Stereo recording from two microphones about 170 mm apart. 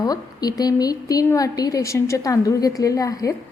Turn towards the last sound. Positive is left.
turn(degrees=20)  # may be behind; listen again after turning